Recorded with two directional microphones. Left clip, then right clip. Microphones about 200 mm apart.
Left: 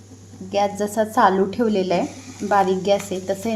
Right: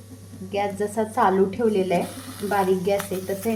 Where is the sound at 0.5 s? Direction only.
35° left (ahead or behind).